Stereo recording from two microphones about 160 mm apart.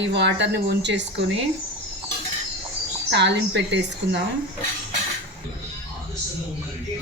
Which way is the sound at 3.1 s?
90° right.